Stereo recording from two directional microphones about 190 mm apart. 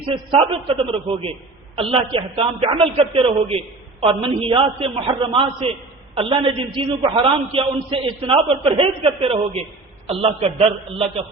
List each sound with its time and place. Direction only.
0.1 s a man's voice: 30° right (ahead or behind)